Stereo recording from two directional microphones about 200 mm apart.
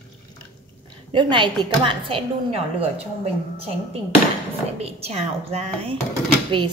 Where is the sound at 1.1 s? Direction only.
25° right (ahead or behind).